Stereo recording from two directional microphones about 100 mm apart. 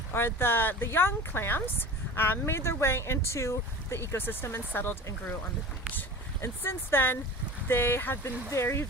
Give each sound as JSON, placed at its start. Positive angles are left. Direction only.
{"t": 0.1, "sound": "speech", "side_deg": 25}